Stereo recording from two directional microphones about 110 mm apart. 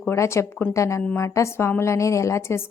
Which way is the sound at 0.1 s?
25° left (ahead or behind).